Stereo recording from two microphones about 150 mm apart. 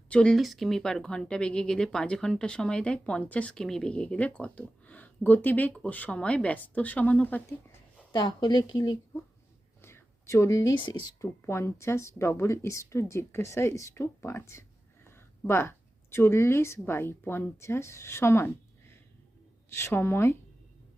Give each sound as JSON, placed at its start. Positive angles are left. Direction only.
{"t": 0.1, "sound": "speech", "side_deg": 5}
{"t": 8.1, "sound": "speech", "side_deg": 30}
{"t": 9.8, "sound": "speech", "side_deg": 15}